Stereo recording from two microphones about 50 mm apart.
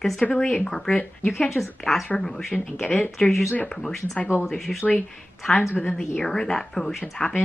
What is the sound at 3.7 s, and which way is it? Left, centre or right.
A woman's voice, centre.